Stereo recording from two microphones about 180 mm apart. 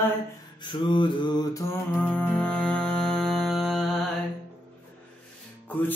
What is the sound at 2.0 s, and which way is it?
Music, 5° left (ahead or behind).